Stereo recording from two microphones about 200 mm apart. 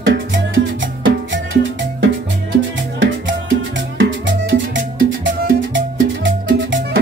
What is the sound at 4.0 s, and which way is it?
Music, 65° right (ahead or behind).